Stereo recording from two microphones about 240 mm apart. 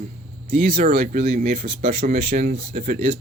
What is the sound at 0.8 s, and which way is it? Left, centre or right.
Speech, right.